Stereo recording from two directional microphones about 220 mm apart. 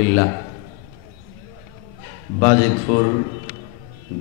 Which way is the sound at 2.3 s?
20° left (ahead or behind).